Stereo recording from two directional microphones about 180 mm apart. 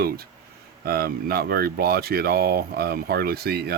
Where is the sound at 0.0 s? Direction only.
60° right (ahead or behind).